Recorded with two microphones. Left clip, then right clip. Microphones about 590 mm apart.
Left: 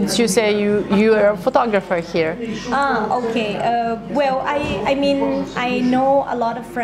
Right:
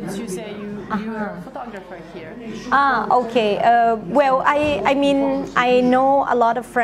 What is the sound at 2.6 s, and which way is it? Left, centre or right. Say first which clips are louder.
A woman's voice: right 2 dB; right.